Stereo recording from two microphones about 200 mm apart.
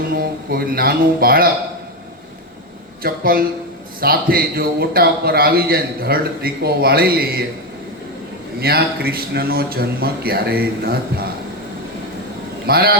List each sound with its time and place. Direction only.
0.1 s a man's voice: 50° right (ahead or behind)
3.0 s a man's voice: 45° right (ahead or behind)
8.6 s a man's voice: 50° right (ahead or behind)
12.6 s a man's voice: 50° right (ahead or behind)